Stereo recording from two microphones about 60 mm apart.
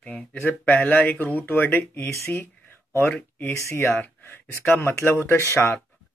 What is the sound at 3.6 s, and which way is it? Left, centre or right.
Speech, left.